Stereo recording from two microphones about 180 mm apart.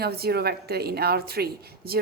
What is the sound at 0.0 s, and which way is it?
A woman's voice, 60° right (ahead or behind).